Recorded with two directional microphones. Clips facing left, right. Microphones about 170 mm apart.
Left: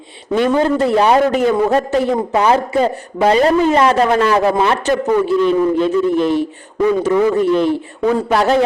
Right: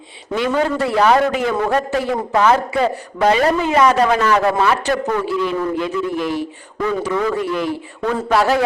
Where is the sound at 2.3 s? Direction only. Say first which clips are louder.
Right 1 dB; 15° left (ahead or behind).